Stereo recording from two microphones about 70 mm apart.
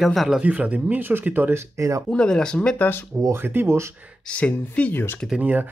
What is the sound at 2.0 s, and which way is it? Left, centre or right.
Speech, centre.